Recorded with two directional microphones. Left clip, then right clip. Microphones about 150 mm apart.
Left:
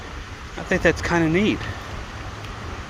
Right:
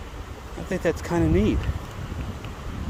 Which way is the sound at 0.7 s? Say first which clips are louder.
Left 6 dB; 25° right (ahead or behind).